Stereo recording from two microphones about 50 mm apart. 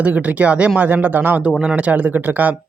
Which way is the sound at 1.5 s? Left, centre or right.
Right.